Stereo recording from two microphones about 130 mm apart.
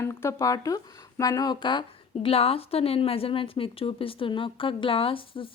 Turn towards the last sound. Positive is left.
turn(degrees=45)  # may be behind; listen again after turning